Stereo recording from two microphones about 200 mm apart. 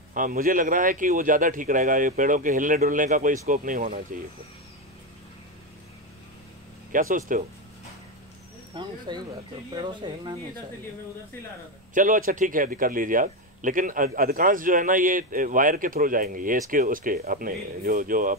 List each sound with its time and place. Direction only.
0.1 s a man's voice: 45° right (ahead or behind)
6.9 s a man's voice: 40° right (ahead or behind)
8.7 s speech: 20° right (ahead or behind)
11.9 s a man's voice: 40° right (ahead or behind)